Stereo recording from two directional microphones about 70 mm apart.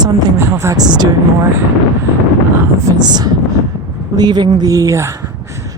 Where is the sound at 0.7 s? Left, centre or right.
Right.